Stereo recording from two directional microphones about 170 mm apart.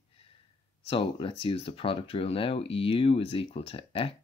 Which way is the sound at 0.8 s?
30° left (ahead or behind).